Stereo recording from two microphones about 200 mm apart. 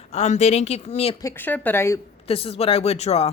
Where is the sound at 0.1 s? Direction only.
35° left (ahead or behind).